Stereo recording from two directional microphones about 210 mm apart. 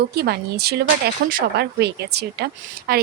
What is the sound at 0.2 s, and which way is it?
A woman's voice, 50° right (ahead or behind).